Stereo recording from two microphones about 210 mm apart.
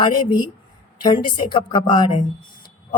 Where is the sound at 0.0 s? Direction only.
20° left (ahead or behind).